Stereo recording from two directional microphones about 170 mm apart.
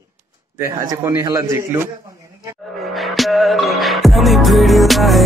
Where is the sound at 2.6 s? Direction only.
Centre (ahead or behind).